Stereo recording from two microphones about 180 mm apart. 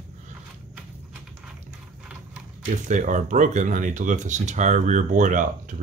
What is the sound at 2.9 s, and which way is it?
Speech, 45° right (ahead or behind).